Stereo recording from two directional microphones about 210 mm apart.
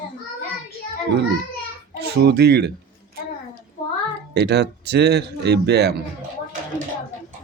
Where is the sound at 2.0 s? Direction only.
50° right (ahead or behind).